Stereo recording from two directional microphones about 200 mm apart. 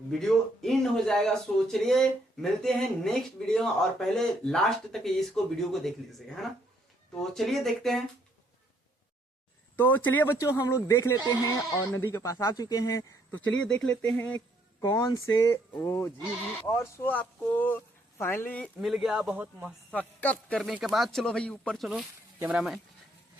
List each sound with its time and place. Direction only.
0.1 s a man's voice: centre (ahead or behind)
9.7 s speech: 10° left (ahead or behind)
13.8 s speech: 5° left (ahead or behind)
19.9 s a man's voice: 10° left (ahead or behind)